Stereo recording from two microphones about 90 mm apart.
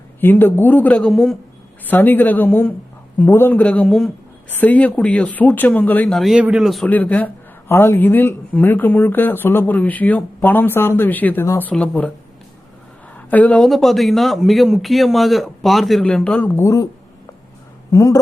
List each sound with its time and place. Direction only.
0.2 s speech: 25° left (ahead or behind)
1.0 s a man's voice: 5° left (ahead or behind)
1.8 s speech: 20° left (ahead or behind)
3.8 s a man's voice: centre (ahead or behind)
4.4 s speech: 20° left (ahead or behind)
6.1 s a man's voice: 5° left (ahead or behind)
6.3 s speech: 10° right (ahead or behind)
6.8 s speech: 20° left (ahead or behind)
13.1 s a woman's voice: 15° left (ahead or behind)
13.7 s a man's voice: centre (ahead or behind)
16.1 s speech: 15° left (ahead or behind)
16.6 s speech: 35° left (ahead or behind)
17.9 s speech: 35° left (ahead or behind)